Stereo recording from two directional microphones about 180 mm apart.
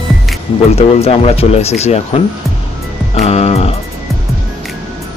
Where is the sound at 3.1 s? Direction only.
35° left (ahead or behind).